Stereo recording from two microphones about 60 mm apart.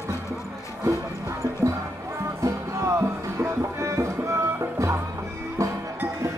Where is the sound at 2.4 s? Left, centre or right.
Right.